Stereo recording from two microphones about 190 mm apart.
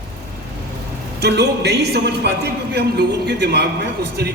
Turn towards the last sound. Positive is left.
turn(degrees=-60)  # may be behind; listen again after turning